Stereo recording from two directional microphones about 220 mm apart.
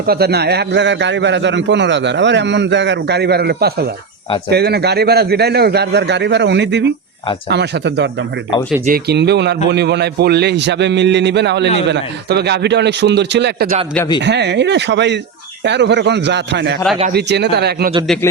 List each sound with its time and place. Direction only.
0.0 s a man's voice: 45° right (ahead or behind)